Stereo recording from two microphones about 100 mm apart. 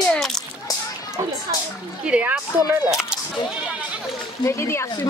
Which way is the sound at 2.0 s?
10° right (ahead or behind).